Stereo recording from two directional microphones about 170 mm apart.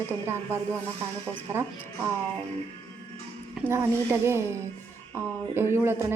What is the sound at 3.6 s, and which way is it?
Speech, 15° right (ahead or behind).